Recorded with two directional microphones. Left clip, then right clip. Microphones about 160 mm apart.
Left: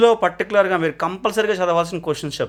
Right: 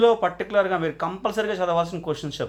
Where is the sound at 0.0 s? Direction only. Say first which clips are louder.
Left 4 dB; 45° left (ahead or behind).